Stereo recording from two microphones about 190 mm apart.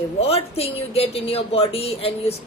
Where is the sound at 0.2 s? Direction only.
30° left (ahead or behind).